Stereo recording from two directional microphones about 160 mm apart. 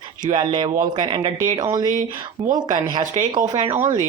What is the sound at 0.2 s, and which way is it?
Speech, 30° right (ahead or behind).